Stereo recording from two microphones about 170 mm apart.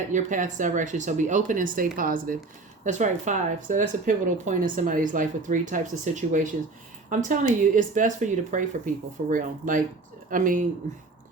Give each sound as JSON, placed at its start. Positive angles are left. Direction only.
{"t": 0.1, "sound": "speech", "side_deg": -50}